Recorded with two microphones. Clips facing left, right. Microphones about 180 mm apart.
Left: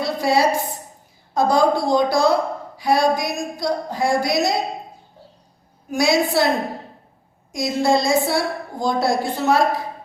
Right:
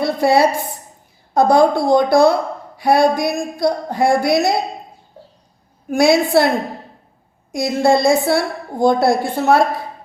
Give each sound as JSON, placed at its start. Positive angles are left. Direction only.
{"t": 0.0, "sound": "a sound", "side_deg": -60}
{"t": 1.3, "sound": "speech", "side_deg": -60}
{"t": 5.9, "sound": "speech", "side_deg": -60}
{"t": 7.5, "sound": "speech", "side_deg": -60}